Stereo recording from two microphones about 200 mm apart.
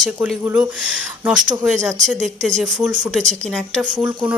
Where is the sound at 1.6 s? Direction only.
Centre (ahead or behind).